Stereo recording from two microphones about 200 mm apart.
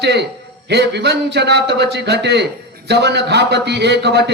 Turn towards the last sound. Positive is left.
turn(degrees=-55)  # may be behind; listen again after turning